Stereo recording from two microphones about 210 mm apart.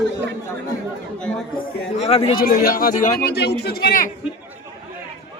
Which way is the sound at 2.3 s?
45° left (ahead or behind).